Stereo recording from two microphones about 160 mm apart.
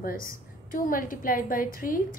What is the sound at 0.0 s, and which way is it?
A woman's voice, 60° left (ahead or behind).